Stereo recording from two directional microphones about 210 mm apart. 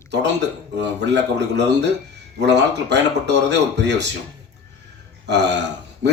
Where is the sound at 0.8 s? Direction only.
55° right (ahead or behind).